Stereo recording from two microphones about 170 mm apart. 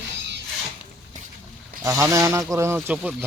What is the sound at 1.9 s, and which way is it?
Speech, 20° right (ahead or behind).